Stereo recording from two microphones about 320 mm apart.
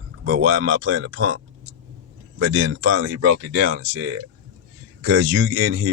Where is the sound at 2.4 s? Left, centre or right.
Right.